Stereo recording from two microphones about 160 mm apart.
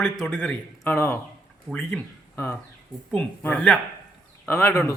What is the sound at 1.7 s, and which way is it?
Speech, 5° left (ahead or behind).